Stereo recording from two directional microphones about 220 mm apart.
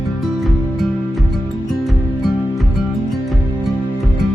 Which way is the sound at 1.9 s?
Centre (ahead or behind).